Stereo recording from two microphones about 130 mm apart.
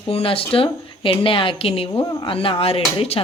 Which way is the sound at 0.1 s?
45° left (ahead or behind).